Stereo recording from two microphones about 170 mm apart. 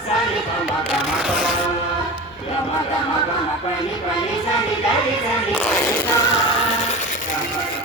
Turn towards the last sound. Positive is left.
turn(degrees=15)  # may be behind; listen again after turning